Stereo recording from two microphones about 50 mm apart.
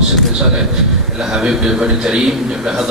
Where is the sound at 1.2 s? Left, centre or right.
Centre.